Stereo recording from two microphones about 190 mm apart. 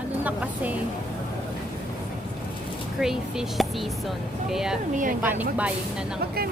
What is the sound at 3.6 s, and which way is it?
Speech, centre (ahead or behind).